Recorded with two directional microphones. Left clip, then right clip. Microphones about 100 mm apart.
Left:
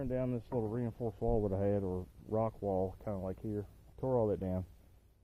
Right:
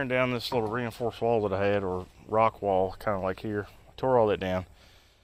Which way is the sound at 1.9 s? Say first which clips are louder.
Right 9 dB; 30° right (ahead or behind).